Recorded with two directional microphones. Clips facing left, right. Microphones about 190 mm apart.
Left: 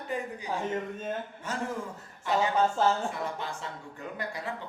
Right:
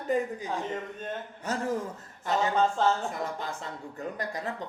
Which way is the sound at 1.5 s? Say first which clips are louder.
Right 5 dB; 40° right (ahead or behind).